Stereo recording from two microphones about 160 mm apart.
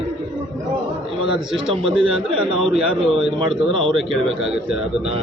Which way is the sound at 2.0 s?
5° right (ahead or behind).